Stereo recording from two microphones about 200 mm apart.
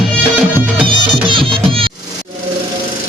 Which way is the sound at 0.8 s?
25° right (ahead or behind).